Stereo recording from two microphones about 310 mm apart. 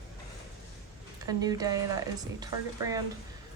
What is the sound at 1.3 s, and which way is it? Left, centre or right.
A woman's voice, centre.